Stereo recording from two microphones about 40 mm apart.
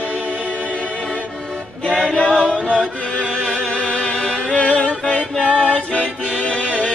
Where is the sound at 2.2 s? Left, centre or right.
Left.